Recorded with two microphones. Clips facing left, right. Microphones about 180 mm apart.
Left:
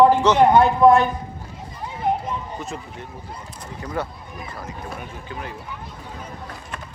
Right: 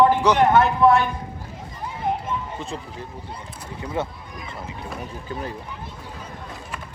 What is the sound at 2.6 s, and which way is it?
Speech, 30° right (ahead or behind).